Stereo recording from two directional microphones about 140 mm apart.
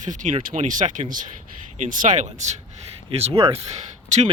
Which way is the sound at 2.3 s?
55° right (ahead or behind).